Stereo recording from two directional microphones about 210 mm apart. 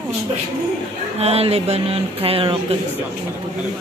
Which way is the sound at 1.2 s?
30° right (ahead or behind).